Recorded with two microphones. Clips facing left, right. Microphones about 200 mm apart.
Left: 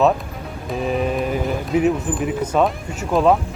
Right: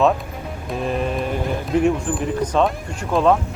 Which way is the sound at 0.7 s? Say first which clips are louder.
Left 2 dB; centre (ahead or behind).